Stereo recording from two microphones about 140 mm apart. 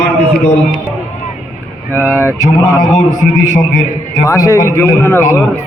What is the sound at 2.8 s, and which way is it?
A man's voice, 65° left (ahead or behind).